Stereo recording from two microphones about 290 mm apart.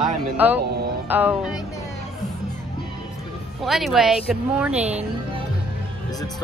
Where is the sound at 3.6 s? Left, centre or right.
Centre.